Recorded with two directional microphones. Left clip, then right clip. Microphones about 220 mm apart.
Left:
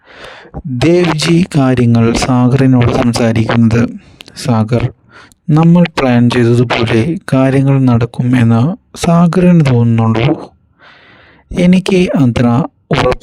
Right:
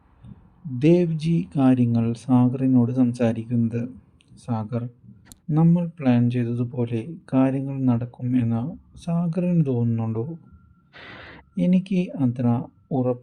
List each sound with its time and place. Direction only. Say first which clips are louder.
0.8 s speech: left 10 dB; 50° left (ahead or behind)
11.5 s speech: left 14 dB; 50° left (ahead or behind)